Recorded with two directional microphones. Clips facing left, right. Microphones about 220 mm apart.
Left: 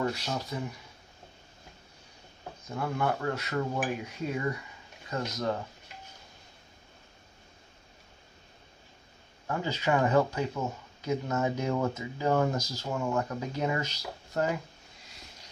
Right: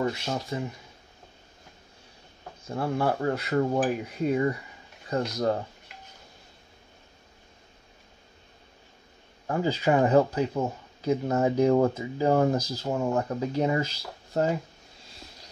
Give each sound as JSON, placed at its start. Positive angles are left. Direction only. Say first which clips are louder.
{"t": 0.0, "sound": "speech", "louder": "right 3 dB", "side_deg": -25}
{"t": 2.7, "sound": "speech", "louder": "right 4 dB", "side_deg": -30}
{"t": 5.1, "sound": "speech", "louder": "right 6 dB", "side_deg": -35}
{"t": 9.5, "sound": "speech", "louder": "right 5 dB", "side_deg": -35}